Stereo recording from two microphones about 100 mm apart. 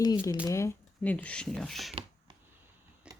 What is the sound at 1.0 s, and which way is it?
Speech, 15° left (ahead or behind).